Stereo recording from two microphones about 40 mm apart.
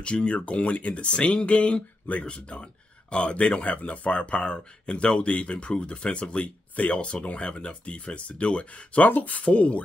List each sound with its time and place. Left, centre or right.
0.0 s speech: left
9.0 s speech: left